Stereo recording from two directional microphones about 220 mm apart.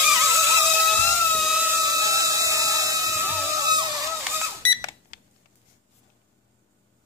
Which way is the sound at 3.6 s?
20° right (ahead or behind).